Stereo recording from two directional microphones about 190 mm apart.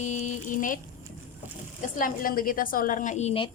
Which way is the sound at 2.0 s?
45° left (ahead or behind).